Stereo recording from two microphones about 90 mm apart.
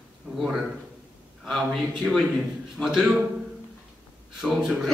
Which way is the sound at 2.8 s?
5° right (ahead or behind).